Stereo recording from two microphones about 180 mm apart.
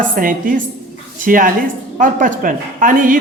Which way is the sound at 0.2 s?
50° right (ahead or behind).